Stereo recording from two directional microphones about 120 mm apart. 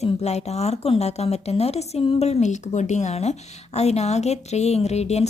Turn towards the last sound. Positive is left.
turn(degrees=65)  # may be behind; listen again after turning